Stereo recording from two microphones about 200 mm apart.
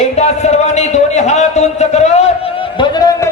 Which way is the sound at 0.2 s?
35° left (ahead or behind).